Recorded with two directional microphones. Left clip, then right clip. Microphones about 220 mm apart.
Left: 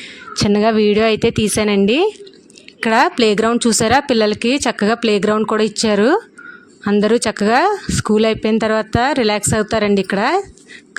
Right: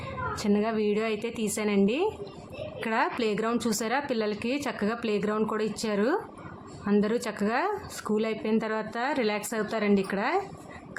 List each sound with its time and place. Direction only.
0.3 s speech: 45° left (ahead or behind)